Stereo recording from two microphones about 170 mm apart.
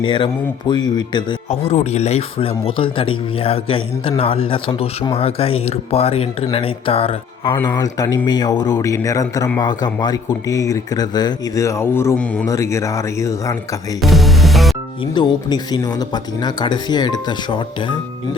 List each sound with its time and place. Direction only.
0.0 s speech: 30° left (ahead or behind)
1.5 s speech: 40° left (ahead or behind)
7.6 s speech: 20° left (ahead or behind)
12.5 s speech: 15° left (ahead or behind)
14.0 s music: centre (ahead or behind)
15.1 s speech: 25° left (ahead or behind)